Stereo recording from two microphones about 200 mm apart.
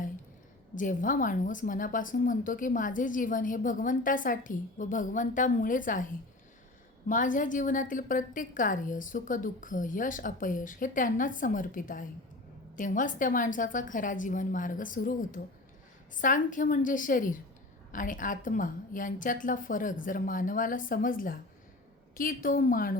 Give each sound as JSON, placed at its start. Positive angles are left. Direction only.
{"t": 0.8, "sound": "a woman's voice", "side_deg": 40}
{"t": 7.1, "sound": "a woman's voice", "side_deg": 40}